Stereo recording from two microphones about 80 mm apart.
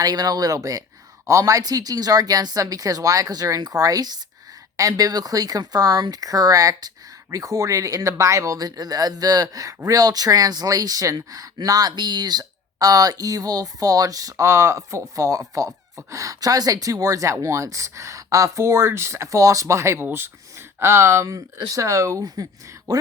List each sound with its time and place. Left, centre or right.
0.0 s speech: right